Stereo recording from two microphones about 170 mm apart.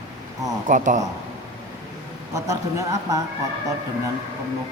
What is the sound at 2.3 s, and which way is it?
Speech, 20° right (ahead or behind).